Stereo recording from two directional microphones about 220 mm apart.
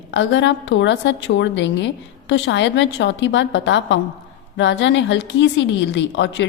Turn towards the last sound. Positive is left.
turn(degrees=55)  # may be behind; listen again after turning